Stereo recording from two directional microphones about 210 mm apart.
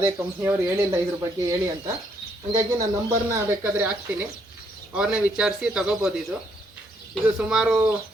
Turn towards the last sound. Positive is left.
turn(degrees=-5)  # may be behind; listen again after turning